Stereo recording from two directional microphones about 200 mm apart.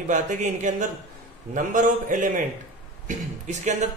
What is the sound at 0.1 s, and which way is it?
Speech, 40° right (ahead or behind).